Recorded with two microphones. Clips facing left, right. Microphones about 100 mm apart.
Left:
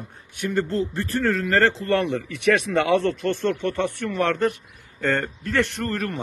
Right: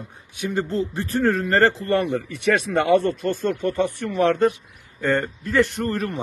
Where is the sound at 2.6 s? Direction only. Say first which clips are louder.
Right 2 dB; 5° right (ahead or behind).